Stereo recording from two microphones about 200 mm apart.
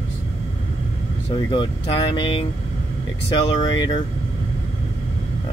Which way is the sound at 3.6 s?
20° left (ahead or behind).